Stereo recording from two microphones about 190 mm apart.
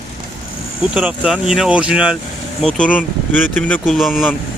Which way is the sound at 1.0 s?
5° right (ahead or behind).